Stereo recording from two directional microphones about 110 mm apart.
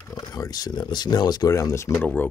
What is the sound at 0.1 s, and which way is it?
Speech, 35° left (ahead or behind).